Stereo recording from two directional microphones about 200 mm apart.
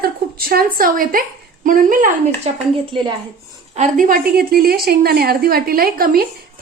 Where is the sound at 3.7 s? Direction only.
40° right (ahead or behind).